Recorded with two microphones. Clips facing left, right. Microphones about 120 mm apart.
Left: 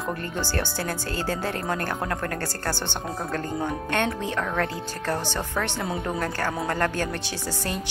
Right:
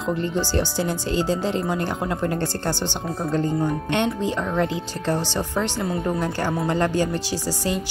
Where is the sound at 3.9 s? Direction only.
20° right (ahead or behind).